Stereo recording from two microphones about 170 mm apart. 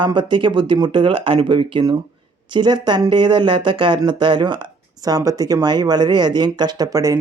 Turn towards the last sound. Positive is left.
turn(degrees=-20)  # may be behind; listen again after turning